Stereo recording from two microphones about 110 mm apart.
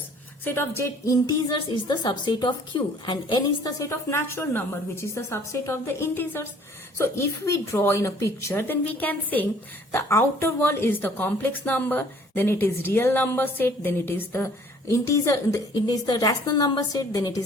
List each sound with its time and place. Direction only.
0.4 s speech: 20° left (ahead or behind); by 3.7 s 45° left (ahead or behind)
3.8 s a woman's voice: 25° left (ahead or behind)